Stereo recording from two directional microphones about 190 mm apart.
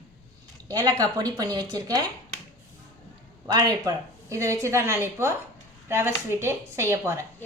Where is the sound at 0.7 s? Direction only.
20° right (ahead or behind).